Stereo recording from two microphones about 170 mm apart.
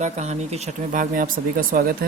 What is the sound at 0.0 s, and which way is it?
Speech, 40° right (ahead or behind).